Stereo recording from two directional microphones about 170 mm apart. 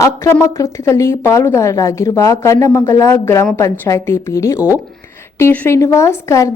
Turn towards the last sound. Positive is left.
turn(degrees=15)  # may be behind; listen again after turning